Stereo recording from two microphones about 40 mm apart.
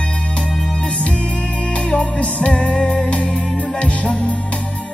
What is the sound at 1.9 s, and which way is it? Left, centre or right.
Music, left.